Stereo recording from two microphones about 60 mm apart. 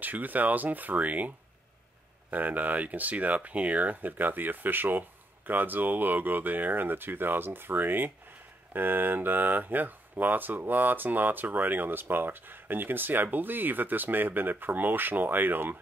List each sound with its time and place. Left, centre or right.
0.0 s speech: right
2.3 s speech: right